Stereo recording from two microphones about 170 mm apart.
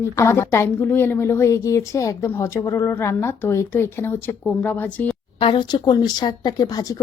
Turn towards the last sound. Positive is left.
turn(degrees=20)  # may be behind; listen again after turning